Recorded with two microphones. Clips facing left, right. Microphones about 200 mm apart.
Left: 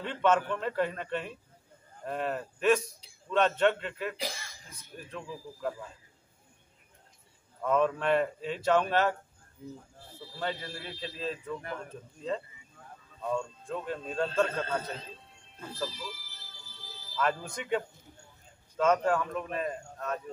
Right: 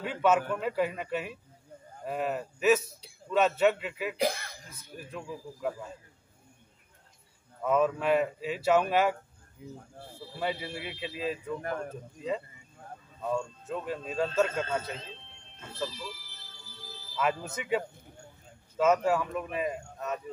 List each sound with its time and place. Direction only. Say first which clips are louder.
0.0 s speech: right 1 dB; 5° right (ahead or behind)
4.2 s speech: right 9 dB; 60° right (ahead or behind)
4.9 s speech: right 1 dB; 5° right (ahead or behind)
7.6 s speech: right 1 dB; 5° right (ahead or behind)
11.6 s speech: right 5 dB; 45° right (ahead or behind)
13.2 s speech: right 1 dB; 5° right (ahead or behind)
15.8 s speech: right 1 dB; centre (ahead or behind)
17.2 s speech: right 1 dB; 5° right (ahead or behind)